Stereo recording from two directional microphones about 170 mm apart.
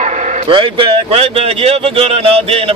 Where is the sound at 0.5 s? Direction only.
30° right (ahead or behind).